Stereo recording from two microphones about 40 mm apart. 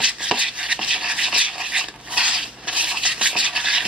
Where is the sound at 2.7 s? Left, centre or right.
Right.